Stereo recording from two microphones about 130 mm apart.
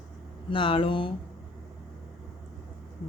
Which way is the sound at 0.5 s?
40° left (ahead or behind).